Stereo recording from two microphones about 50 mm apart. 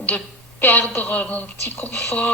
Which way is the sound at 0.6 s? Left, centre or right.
Left.